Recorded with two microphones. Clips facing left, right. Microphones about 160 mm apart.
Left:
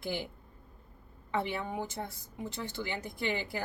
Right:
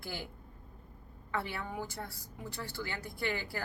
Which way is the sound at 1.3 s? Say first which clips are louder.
Left 4 dB; 20° left (ahead or behind).